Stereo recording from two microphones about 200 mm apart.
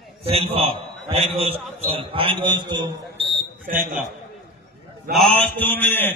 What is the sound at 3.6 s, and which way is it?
Speech, 45° right (ahead or behind).